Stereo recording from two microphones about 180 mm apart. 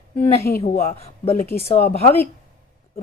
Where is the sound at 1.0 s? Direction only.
35° left (ahead or behind).